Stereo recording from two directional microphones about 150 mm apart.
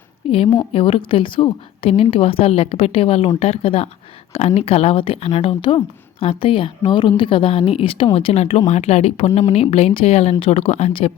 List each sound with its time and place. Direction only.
0.3 s a woman's voice: 40° left (ahead or behind)